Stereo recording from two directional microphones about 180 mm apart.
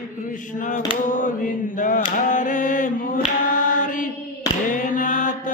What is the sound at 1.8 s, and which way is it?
Mantra, 45° left (ahead or behind).